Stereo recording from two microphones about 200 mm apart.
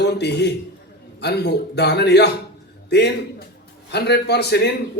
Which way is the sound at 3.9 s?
55° left (ahead or behind).